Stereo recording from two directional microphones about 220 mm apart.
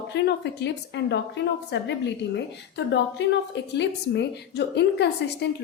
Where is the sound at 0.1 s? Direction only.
50° left (ahead or behind).